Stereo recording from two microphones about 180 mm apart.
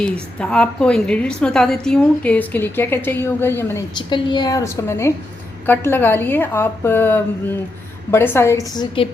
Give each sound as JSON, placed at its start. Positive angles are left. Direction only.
{"t": 0.0, "sound": "a woman's voice", "side_deg": 5}
{"t": 3.9, "sound": "a woman's voice", "side_deg": 25}